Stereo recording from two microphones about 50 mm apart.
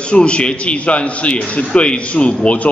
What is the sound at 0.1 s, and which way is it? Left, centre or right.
A man's voice, left.